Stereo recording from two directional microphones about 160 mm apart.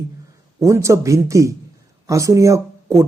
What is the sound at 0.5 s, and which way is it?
Speech, 20° right (ahead or behind).